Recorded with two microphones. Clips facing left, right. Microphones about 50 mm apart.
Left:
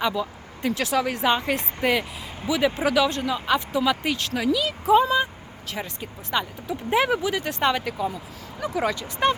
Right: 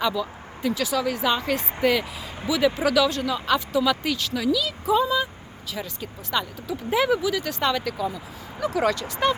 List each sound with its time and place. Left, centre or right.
0.1 s vehicle: left
0.7 s speech: left
4.3 s speech: left
4.5 s speech: left
8.8 s speech: centre